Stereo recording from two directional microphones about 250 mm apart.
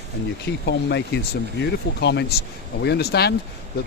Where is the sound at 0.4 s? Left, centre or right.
Left.